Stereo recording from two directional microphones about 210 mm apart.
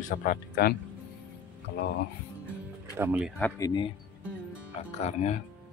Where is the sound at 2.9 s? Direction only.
10° right (ahead or behind).